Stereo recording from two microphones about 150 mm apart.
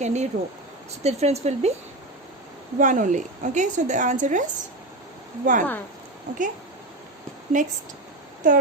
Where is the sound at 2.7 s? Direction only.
60° right (ahead or behind).